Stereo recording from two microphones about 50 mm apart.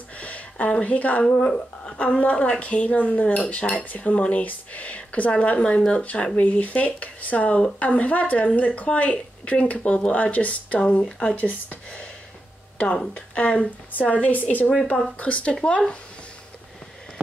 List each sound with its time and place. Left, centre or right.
0.2 s a sound: left
1.3 s a woman's voice: centre
11.3 s a woman's voice: left
12.7 s a woman's voice: centre